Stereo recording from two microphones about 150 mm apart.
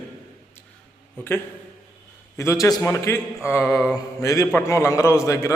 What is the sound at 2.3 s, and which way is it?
A man's voice, 20° left (ahead or behind).